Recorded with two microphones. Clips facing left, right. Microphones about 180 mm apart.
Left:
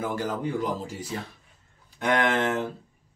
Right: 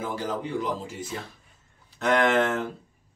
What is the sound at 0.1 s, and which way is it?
Speech, 45° left (ahead or behind).